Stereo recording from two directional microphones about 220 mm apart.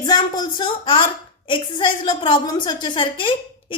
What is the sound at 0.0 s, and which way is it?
A woman's voice, 20° left (ahead or behind).